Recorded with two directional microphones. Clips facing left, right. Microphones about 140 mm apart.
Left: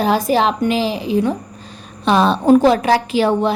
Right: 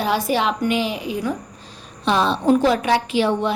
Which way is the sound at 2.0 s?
50° left (ahead or behind).